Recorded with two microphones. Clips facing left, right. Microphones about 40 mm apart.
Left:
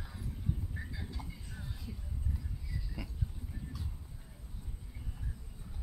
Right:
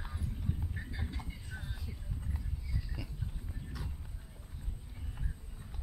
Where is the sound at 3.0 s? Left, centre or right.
Centre.